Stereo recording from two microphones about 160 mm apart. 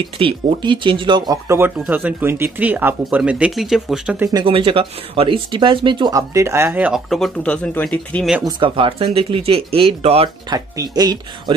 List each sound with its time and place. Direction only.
0.2 s speech: 30° right (ahead or behind); by 4.3 s 5° right (ahead or behind)
4.3 s speech: 30° right (ahead or behind)
6.9 s speech: centre (ahead or behind)
8.5 s speech: 30° right (ahead or behind)
10.5 s speech: 25° right (ahead or behind)